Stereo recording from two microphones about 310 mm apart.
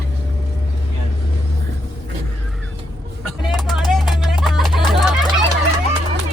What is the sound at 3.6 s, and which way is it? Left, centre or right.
Music, centre.